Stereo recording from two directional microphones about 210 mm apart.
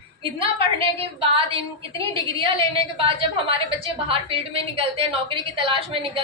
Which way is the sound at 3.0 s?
25° right (ahead or behind).